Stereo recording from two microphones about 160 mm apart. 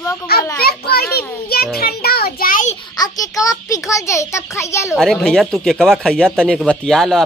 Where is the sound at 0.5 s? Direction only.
75° left (ahead or behind).